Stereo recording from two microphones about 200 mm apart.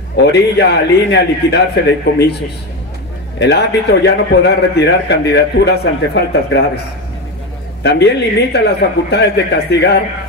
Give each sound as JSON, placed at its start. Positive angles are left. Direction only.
{"t": 0.1, "sound": "a man's voice", "side_deg": 55}
{"t": 3.3, "sound": "a man's voice", "side_deg": 55}
{"t": 7.8, "sound": "a man's voice", "side_deg": 55}